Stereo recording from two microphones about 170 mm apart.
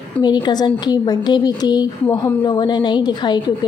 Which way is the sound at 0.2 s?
25° left (ahead or behind).